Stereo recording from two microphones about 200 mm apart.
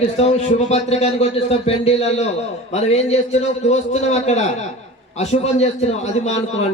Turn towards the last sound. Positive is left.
turn(degrees=35)  # may be behind; listen again after turning